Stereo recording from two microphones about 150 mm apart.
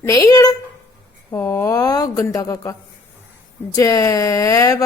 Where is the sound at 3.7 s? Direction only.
20° left (ahead or behind).